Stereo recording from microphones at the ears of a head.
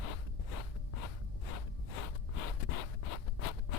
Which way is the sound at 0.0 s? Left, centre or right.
Left.